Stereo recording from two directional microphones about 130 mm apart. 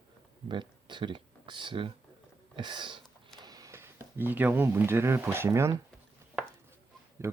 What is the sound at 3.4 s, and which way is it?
Speech, 25° right (ahead or behind).